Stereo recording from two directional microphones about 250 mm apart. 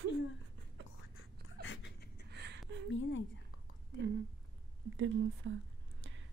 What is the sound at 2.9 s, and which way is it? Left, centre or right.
Speech, left.